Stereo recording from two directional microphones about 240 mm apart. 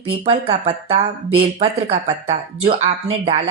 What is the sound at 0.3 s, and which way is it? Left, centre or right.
Speech, right.